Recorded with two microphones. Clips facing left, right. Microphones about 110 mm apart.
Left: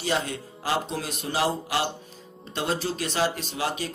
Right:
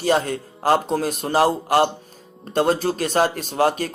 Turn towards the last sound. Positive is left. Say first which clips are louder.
# right 9 dB
turn(degrees=-50)  # may be behind; listen again after turning